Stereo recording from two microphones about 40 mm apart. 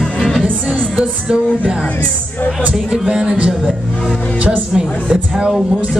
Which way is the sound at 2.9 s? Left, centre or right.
Centre.